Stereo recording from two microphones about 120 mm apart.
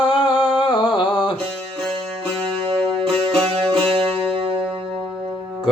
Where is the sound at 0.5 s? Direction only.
40° left (ahead or behind).